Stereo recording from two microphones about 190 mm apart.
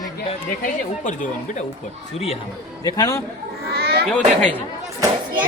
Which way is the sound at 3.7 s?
55° right (ahead or behind).